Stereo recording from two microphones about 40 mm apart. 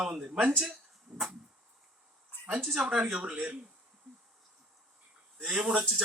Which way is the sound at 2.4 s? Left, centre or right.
Right.